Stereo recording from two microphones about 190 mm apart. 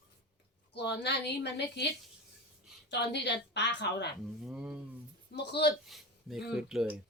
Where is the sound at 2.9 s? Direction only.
65° left (ahead or behind).